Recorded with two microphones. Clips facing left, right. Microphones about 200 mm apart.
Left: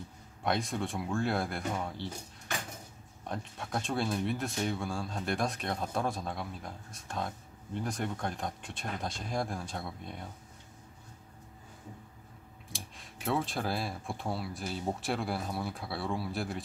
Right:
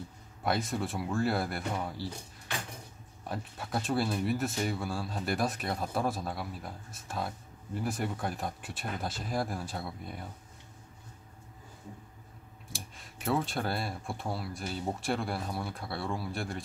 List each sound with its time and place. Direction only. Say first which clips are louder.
0.4 s speech: right 1 dB; centre (ahead or behind)
3.3 s speech: right 1 dB; 5° right (ahead or behind)
12.7 s speech: right 1 dB; centre (ahead or behind)